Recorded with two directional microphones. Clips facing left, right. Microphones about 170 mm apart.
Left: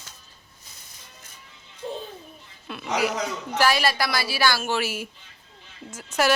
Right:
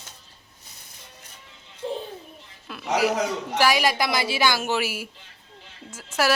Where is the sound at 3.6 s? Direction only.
15° right (ahead or behind).